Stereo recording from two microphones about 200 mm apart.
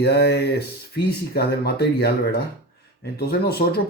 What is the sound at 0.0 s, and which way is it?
Speech, 55° left (ahead or behind).